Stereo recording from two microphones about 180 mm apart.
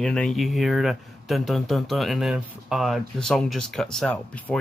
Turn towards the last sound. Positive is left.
turn(degrees=5)  # may be behind; listen again after turning